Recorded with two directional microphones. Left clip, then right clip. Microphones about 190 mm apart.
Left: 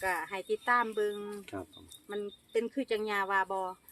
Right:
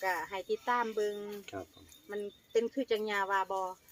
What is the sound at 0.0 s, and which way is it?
Speech, 15° left (ahead or behind).